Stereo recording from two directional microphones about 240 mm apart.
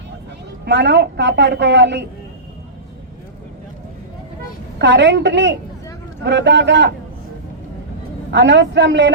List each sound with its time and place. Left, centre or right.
0.6 s a woman's voice: right
4.8 s a woman's voice: right
8.3 s a woman's voice: right